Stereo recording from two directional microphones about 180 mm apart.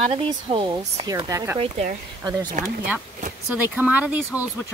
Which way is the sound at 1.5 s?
35° right (ahead or behind).